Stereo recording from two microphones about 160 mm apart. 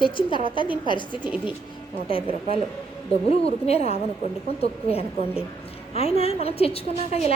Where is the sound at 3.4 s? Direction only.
40° left (ahead or behind).